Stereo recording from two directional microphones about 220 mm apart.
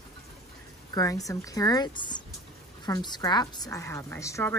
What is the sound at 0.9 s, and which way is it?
A woman's voice, 15° left (ahead or behind).